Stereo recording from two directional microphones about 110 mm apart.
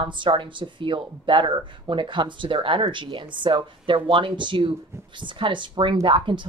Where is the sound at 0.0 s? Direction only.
50° right (ahead or behind).